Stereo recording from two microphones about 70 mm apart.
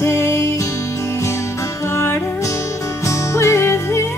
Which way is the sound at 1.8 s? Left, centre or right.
Left.